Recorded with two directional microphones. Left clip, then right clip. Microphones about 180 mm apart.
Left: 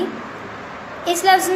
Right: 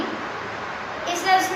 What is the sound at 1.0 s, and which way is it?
Speech, 60° left (ahead or behind).